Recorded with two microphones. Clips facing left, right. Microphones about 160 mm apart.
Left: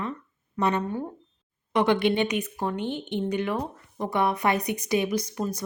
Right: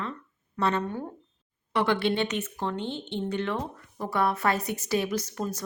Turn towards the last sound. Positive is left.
turn(degrees=10)  # may be behind; listen again after turning